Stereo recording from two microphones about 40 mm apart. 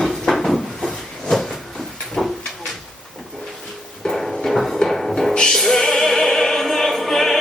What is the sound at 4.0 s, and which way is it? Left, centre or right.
Music, centre.